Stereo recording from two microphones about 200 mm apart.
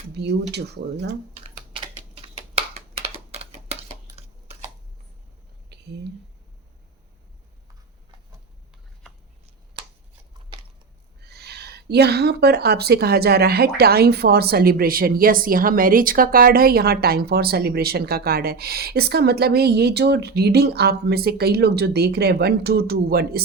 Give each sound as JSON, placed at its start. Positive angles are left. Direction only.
{"t": 0.1, "sound": "speech", "side_deg": -55}
{"t": 1.5, "sound": "typing", "side_deg": -25}
{"t": 5.6, "sound": "whispering", "side_deg": -55}
{"t": 11.2, "sound": "speech", "side_deg": -55}